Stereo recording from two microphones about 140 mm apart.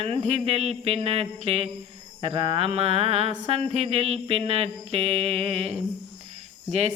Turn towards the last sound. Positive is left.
turn(degrees=-50)  # may be behind; listen again after turning